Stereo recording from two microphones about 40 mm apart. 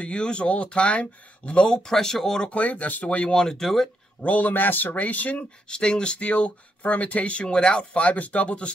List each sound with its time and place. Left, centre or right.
0.0 s speech: left
2.5 s speech: left
3.3 s speech: centre
4.2 s speech: left
5.7 s speech: left